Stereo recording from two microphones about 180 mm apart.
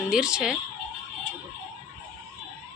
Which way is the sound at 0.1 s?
5° right (ahead or behind).